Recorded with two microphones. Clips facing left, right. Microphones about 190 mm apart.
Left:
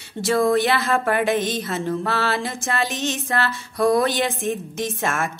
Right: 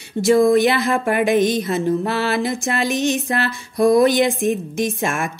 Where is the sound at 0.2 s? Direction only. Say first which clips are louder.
Right 5 dB; 15° right (ahead or behind).